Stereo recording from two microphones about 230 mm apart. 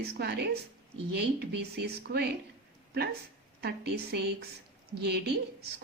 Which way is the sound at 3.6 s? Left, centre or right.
Right.